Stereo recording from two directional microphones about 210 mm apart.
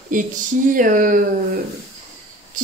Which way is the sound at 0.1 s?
40° right (ahead or behind).